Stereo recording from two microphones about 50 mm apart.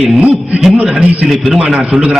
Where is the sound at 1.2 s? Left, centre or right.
Centre.